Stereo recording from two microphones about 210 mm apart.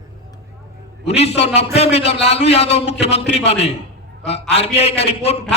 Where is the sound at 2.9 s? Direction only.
55° left (ahead or behind).